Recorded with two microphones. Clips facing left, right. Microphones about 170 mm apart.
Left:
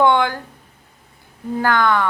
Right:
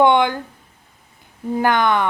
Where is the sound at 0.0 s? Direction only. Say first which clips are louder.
Right 1 dB; 20° right (ahead or behind).